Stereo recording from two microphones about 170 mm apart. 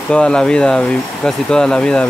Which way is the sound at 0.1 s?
5° left (ahead or behind).